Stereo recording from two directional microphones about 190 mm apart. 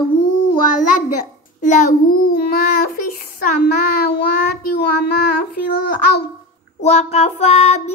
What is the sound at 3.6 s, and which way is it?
Child singing, 55° left (ahead or behind).